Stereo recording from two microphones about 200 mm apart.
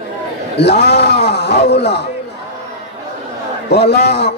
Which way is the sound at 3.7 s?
55° left (ahead or behind).